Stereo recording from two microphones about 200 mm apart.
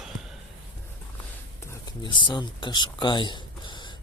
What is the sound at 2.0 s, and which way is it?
Speech, 25° left (ahead or behind).